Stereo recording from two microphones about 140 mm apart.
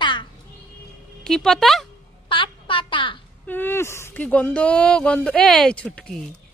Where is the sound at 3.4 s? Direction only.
15° left (ahead or behind).